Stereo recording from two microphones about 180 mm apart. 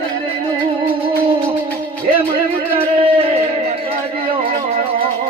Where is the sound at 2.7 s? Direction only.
30° right (ahead or behind).